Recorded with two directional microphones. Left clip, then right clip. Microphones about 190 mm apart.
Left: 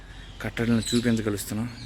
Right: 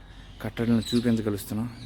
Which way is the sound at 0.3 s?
10° right (ahead or behind).